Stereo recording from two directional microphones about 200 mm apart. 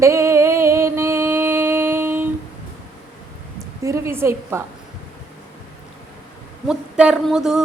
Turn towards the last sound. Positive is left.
turn(degrees=-5)  # may be behind; listen again after turning